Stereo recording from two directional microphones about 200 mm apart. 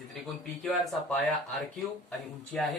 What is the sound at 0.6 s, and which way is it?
A man's voice, centre (ahead or behind).